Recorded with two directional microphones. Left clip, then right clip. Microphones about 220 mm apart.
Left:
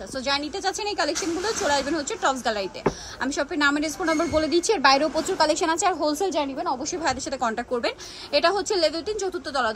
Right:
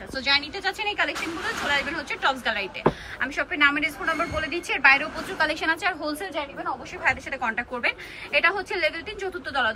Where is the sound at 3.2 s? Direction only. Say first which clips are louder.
Right 1 dB; 15° left (ahead or behind).